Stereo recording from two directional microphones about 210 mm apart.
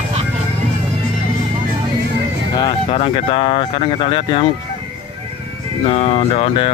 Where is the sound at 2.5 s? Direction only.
25° left (ahead or behind).